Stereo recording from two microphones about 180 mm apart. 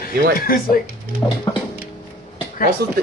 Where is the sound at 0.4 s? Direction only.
55° left (ahead or behind).